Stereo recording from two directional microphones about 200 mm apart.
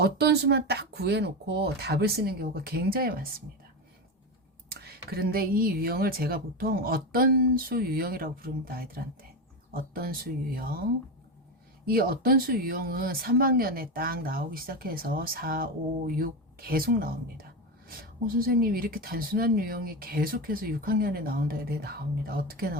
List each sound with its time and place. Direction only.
0.0 s speech: 55° right (ahead or behind)
4.7 s speech: 50° right (ahead or behind)
11.9 s speech: 45° right (ahead or behind)